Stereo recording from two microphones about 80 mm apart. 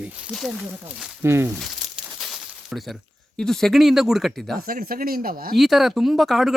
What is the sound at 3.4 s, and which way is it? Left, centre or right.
Speech, centre.